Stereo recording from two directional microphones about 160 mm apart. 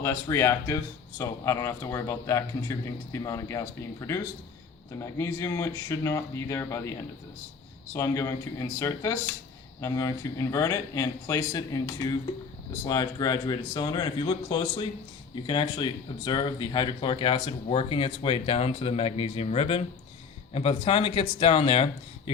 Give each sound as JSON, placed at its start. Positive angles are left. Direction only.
{"t": 0.0, "sound": "speech", "side_deg": 20}
{"t": 7.9, "sound": "speech", "side_deg": 15}